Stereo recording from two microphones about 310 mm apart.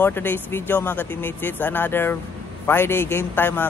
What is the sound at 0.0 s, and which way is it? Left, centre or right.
A man's voice, centre.